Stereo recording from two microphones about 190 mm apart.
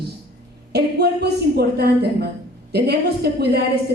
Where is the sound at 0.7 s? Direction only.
60° right (ahead or behind).